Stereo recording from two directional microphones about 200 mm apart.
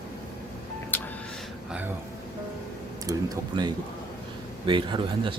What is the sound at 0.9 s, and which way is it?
Music, 10° left (ahead or behind).